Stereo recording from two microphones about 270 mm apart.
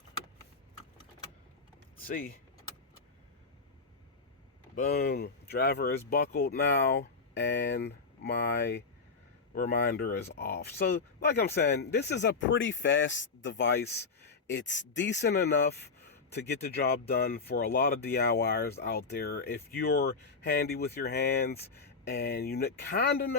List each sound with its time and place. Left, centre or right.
2.0 s speech: left
4.7 s speech: left